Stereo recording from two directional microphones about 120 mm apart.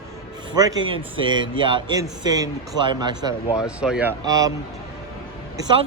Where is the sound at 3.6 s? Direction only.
5° right (ahead or behind).